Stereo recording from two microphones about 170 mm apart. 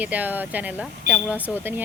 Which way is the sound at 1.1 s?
90° right.